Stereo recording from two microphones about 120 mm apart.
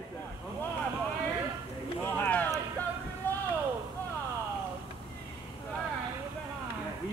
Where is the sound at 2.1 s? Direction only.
15° left (ahead or behind).